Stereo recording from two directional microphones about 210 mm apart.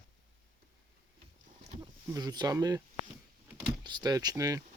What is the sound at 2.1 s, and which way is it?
Speech, 20° right (ahead or behind).